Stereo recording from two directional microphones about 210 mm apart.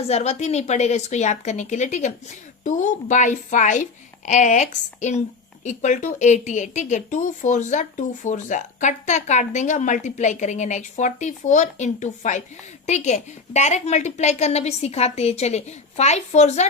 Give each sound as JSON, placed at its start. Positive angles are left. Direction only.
{"t": 0.0, "sound": "speech", "side_deg": 30}